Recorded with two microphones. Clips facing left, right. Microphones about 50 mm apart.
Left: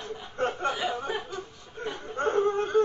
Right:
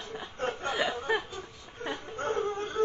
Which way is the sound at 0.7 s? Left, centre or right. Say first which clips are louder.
Even; right.